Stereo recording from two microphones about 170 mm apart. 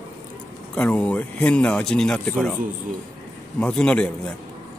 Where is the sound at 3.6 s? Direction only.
5° left (ahead or behind).